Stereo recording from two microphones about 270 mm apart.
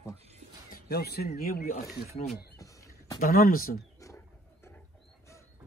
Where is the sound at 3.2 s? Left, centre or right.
Left.